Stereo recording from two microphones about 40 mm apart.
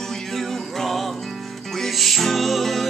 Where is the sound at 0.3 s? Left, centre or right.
Centre.